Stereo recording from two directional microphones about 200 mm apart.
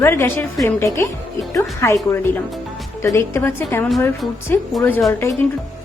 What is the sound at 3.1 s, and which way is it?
A woman's voice, 10° left (ahead or behind).